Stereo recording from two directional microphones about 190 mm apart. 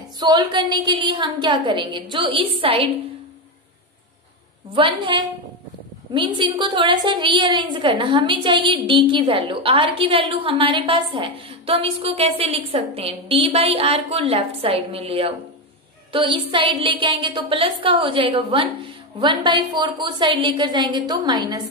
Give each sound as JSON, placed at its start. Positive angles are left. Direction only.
{"t": 0.2, "sound": "a woman's voice", "side_deg": -25}
{"t": 4.7, "sound": "a woman's voice", "side_deg": -25}